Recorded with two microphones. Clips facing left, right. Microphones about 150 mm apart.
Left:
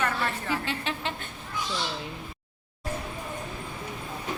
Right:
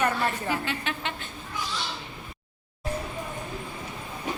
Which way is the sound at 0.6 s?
30° left (ahead or behind).